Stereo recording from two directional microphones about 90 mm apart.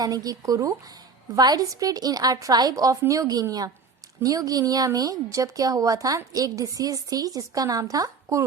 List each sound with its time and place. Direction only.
0.0 s a woman's voice: 45° right (ahead or behind)